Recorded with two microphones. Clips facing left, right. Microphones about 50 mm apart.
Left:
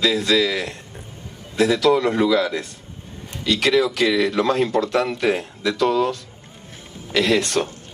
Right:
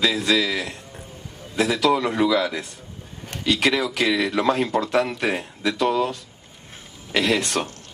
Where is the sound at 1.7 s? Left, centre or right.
Right.